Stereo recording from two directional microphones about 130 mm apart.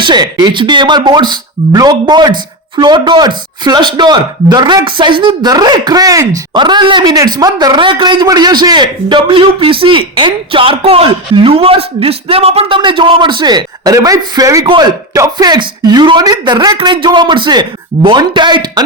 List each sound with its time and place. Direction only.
0.0 s speech: 35° right (ahead or behind)